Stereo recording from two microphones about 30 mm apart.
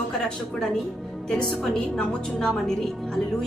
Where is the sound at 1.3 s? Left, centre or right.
Centre.